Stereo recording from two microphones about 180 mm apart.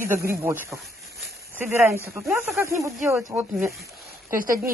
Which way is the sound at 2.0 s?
15° right (ahead or behind).